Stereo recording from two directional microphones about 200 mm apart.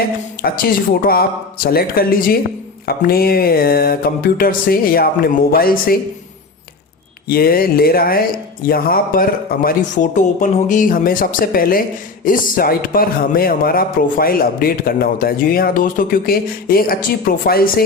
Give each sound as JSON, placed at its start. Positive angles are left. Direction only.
{"t": 0.4, "sound": "speech", "side_deg": 50}
{"t": 7.3, "sound": "speech", "side_deg": 50}